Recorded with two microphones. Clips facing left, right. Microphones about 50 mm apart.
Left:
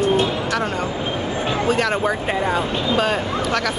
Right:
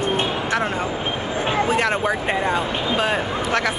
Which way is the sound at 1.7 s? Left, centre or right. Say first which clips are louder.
Left 3 dB; right.